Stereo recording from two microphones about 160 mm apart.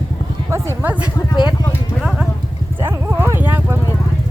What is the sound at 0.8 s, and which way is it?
Speech, 10° right (ahead or behind).